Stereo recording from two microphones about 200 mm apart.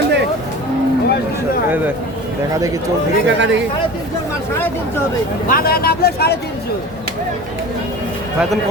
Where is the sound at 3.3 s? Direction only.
65° right (ahead or behind).